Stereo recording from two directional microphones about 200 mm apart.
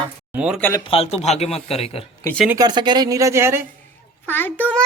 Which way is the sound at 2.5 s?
20° right (ahead or behind).